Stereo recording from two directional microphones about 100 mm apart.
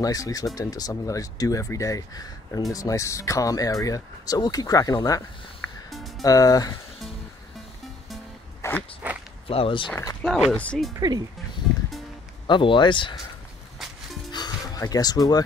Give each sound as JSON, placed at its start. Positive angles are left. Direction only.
{"t": 0.0, "sound": "speech", "side_deg": 35}
{"t": 5.9, "sound": "music", "side_deg": 0}
{"t": 6.2, "sound": "speech", "side_deg": 35}
{"t": 8.6, "sound": "walk", "side_deg": 25}
{"t": 9.0, "sound": "speech", "side_deg": -15}
{"t": 9.5, "sound": "speech", "side_deg": 65}
{"t": 10.5, "sound": "speech", "side_deg": 10}
{"t": 10.9, "sound": "speech", "side_deg": -40}
{"t": 12.4, "sound": "speech", "side_deg": 55}
{"t": 14.3, "sound": "music", "side_deg": 40}